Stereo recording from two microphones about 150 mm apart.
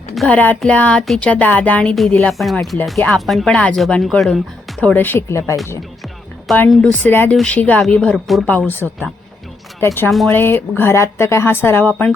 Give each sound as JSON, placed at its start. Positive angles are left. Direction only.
{"t": 0.3, "sound": "speech", "side_deg": 10}
{"t": 6.7, "sound": "speech", "side_deg": 5}
{"t": 8.4, "sound": "speech", "side_deg": 10}
{"t": 10.1, "sound": "speech", "side_deg": 0}
{"t": 10.3, "sound": "speech", "side_deg": 15}